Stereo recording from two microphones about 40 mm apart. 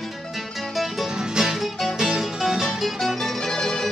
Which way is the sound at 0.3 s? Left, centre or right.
Centre.